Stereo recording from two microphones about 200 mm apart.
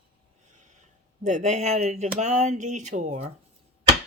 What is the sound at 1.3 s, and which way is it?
Speech, 35° right (ahead or behind).